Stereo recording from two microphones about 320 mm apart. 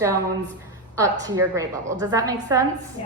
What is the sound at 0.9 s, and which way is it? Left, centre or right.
A woman's voice, centre.